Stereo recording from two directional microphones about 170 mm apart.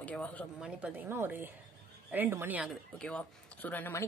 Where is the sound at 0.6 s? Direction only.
10° right (ahead or behind).